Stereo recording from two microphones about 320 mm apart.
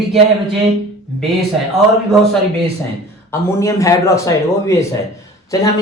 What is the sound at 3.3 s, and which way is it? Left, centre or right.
A man's voice, centre.